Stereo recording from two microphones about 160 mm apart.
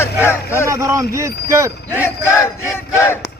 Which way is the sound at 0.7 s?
20° right (ahead or behind).